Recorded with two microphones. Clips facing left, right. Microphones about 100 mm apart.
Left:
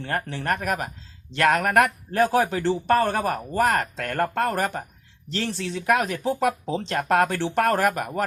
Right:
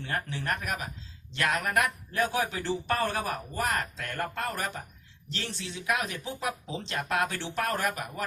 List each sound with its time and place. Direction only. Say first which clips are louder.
0.0 s speech: left 5 dB; 45° left (ahead or behind)
2.1 s speech: left 9 dB; 45° left (ahead or behind)
3.6 s speech: left 9 dB; 60° left (ahead or behind)